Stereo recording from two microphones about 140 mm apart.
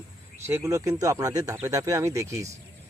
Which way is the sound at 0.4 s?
15° right (ahead or behind).